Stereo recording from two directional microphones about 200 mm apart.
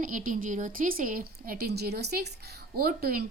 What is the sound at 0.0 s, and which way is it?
A woman's voice, 40° right (ahead or behind).